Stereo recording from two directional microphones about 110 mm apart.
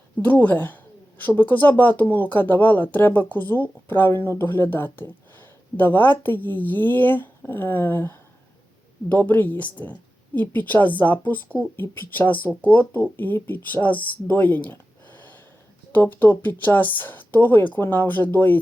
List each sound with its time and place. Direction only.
0.2 s speech: 15° left (ahead or behind)